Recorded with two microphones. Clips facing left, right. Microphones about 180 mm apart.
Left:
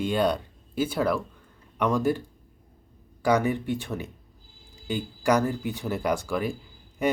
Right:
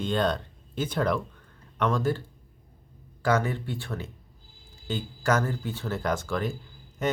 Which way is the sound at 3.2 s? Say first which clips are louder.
Left 3 dB; 15° left (ahead or behind).